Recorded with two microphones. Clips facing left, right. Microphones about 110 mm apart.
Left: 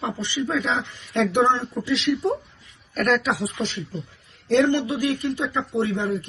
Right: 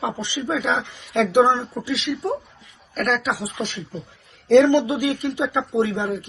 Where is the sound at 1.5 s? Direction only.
5° right (ahead or behind).